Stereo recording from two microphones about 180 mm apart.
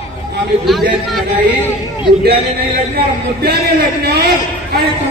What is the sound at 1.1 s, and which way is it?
Speech, 10° right (ahead or behind).